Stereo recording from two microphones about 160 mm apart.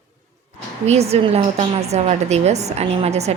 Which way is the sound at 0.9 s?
40° right (ahead or behind).